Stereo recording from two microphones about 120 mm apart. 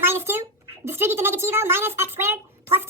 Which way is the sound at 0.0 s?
20° right (ahead or behind).